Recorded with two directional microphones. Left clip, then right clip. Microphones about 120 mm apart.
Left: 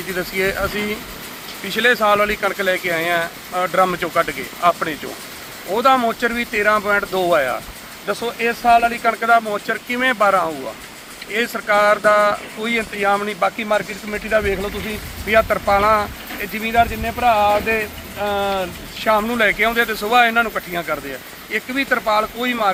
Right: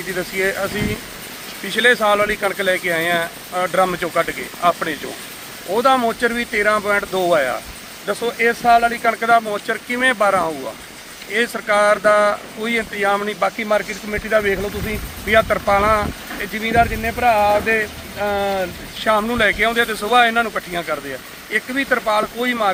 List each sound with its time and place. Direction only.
0.2 s speech: 15° right (ahead or behind)
1.7 s speech: 15° right (ahead or behind)
15.3 s speech: 15° right (ahead or behind); by 19.0 s 30° right (ahead or behind)
19.0 s speech: 10° right (ahead or behind)